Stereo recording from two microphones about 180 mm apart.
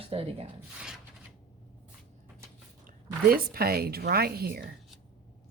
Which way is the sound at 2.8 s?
55° right (ahead or behind).